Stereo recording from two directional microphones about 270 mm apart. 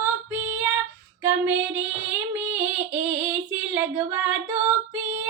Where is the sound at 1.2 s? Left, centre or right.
Centre.